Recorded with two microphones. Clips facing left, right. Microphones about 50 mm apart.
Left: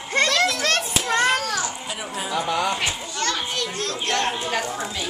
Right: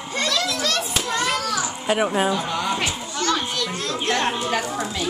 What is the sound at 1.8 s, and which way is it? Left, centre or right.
Speech, right.